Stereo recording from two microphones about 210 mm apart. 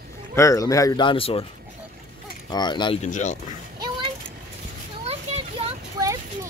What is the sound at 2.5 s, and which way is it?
Speech, 20° left (ahead or behind).